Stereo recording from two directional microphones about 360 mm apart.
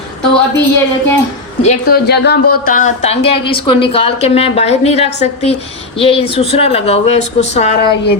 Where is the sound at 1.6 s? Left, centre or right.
Left.